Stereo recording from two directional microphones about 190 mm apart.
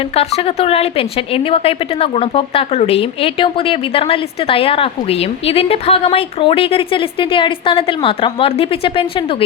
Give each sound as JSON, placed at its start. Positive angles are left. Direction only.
{"t": 0.2, "sound": "a woman's voice", "side_deg": 30}